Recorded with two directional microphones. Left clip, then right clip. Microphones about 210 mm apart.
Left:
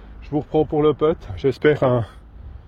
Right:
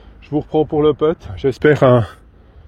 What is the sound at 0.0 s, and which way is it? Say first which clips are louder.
Speech: right 4 dB; 45° right (ahead or behind).